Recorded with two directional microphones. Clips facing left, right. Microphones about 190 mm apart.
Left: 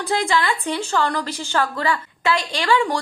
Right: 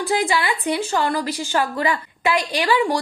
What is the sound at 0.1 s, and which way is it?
A woman's voice, 10° right (ahead or behind).